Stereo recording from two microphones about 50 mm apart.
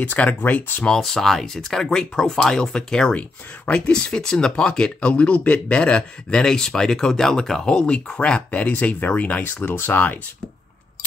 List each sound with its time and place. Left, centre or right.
0.0 s speech: left
0.9 s speech: centre; by 10.1 s left